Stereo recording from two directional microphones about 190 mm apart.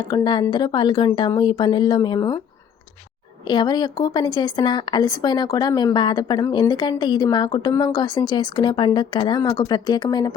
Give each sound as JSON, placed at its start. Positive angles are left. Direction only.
{"t": 0.1, "sound": "speech", "side_deg": 20}
{"t": 3.4, "sound": "speech", "side_deg": 20}